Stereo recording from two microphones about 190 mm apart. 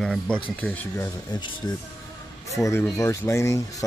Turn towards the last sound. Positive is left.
turn(degrees=15)  # may be behind; listen again after turning